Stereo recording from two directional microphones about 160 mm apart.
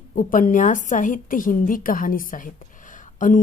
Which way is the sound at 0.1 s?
55° left (ahead or behind).